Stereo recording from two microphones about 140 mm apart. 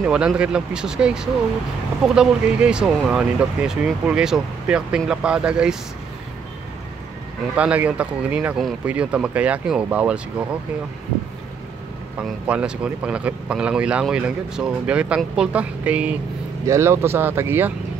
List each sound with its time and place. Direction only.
0.0 s speech: 5° right (ahead or behind)
7.5 s speech: 10° right (ahead or behind)
12.2 s speech: 5° right (ahead or behind)
16.6 s speech: 20° right (ahead or behind)